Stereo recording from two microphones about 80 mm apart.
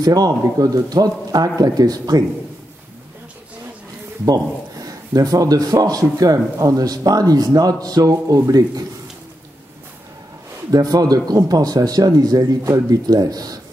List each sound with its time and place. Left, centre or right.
0.0 s a man's voice: right
4.8 s a man's voice: right
10.7 s a man's voice: right